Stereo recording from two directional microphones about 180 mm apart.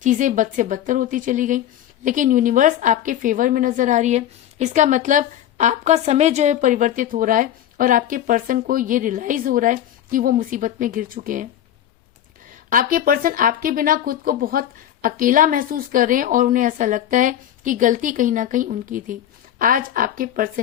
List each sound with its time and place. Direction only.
0.0 s a woman's voice: 45° right (ahead or behind)
12.7 s a woman's voice: 50° right (ahead or behind)